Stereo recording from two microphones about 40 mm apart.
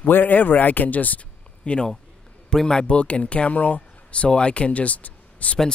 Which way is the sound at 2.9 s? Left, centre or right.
Left.